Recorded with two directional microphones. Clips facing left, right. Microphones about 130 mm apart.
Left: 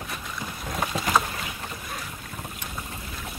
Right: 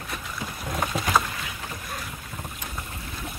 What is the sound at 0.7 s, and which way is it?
Rowboat, centre (ahead or behind).